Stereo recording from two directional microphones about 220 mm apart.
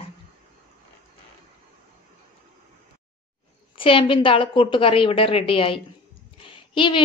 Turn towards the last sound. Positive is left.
turn(degrees=20)  # may be behind; listen again after turning